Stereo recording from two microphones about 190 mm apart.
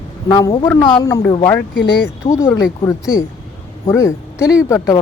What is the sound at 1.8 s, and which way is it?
Speech, 60° left (ahead or behind).